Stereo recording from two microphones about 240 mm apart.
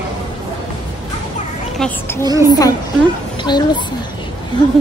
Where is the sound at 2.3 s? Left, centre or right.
Centre.